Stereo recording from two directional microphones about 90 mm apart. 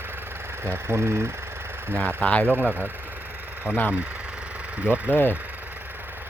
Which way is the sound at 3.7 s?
30° left (ahead or behind).